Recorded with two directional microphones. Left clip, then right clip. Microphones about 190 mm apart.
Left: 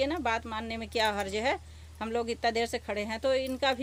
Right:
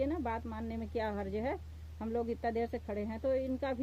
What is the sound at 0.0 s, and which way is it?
Speech, centre (ahead or behind).